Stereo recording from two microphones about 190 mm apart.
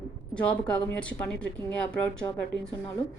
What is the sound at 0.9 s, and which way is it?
Speech, 5° left (ahead or behind).